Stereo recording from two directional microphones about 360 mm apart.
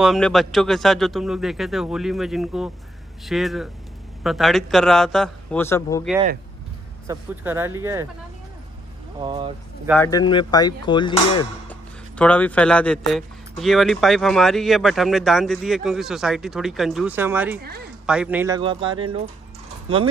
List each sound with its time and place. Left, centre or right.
0.0 s speech: centre
7.1 s speech: centre
9.8 s speech: centre
17.6 s speech: right
18.0 s speech: centre